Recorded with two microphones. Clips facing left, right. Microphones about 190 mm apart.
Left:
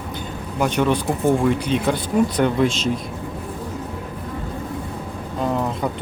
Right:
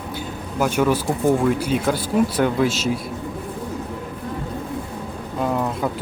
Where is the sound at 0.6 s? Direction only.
5° right (ahead or behind).